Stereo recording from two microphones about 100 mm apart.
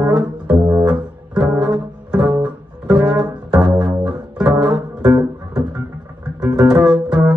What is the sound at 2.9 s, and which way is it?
Double bass, 5° right (ahead or behind).